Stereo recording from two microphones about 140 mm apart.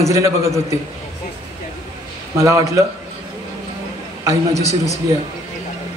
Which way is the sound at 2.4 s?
20° right (ahead or behind).